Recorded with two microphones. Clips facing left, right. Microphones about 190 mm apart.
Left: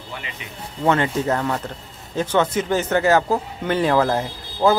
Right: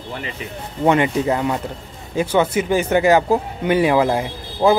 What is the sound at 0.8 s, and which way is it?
Speech, 15° right (ahead or behind).